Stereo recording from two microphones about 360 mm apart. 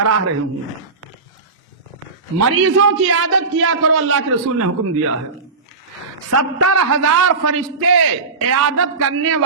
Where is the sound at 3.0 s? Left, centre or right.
Right.